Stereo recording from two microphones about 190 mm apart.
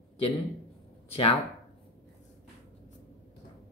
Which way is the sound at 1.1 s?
30° left (ahead or behind).